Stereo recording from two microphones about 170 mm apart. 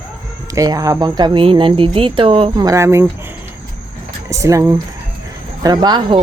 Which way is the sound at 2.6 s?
15° right (ahead or behind).